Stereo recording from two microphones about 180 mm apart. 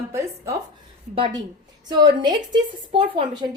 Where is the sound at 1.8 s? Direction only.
25° right (ahead or behind).